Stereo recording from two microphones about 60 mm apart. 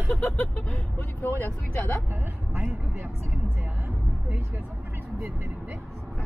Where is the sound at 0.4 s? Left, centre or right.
Left.